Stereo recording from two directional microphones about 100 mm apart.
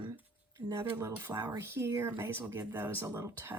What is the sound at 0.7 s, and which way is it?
Speech, 30° right (ahead or behind).